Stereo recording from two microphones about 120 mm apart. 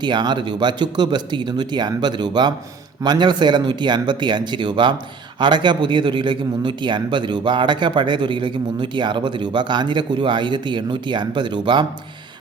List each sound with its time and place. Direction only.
0.0 s a man's voice: 40° right (ahead or behind)